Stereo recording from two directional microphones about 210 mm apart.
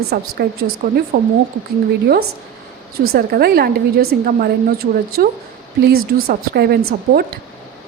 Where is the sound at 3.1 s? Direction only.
50° right (ahead or behind).